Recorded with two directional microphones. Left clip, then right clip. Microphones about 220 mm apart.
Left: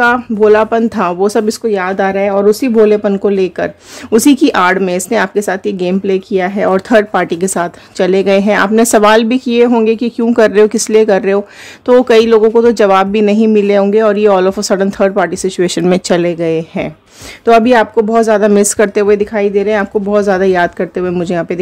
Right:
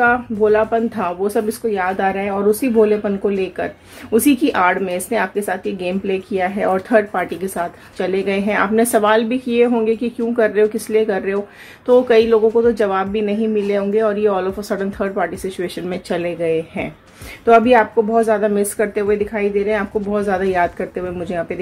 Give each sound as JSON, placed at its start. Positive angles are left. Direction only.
{"t": 0.0, "sound": "speech", "side_deg": 50}